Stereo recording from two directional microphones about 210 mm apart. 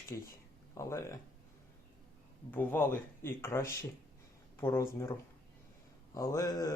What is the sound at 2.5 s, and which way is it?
Speech, 10° left (ahead or behind).